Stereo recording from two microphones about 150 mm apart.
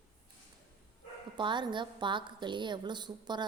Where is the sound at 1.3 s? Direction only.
30° right (ahead or behind).